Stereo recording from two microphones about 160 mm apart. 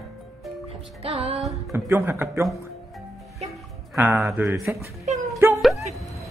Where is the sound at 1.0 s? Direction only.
40° right (ahead or behind).